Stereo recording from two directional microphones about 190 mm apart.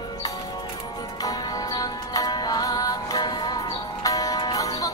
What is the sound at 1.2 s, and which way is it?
Music, 20° left (ahead or behind).